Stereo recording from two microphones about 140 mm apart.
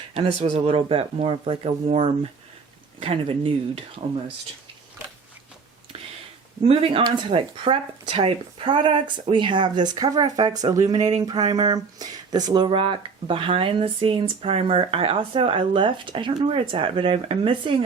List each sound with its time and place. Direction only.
0.1 s speech: 45° right (ahead or behind)
6.6 s speech: 45° right (ahead or behind)